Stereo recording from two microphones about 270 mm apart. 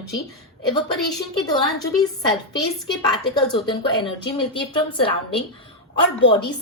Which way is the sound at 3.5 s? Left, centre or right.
Centre.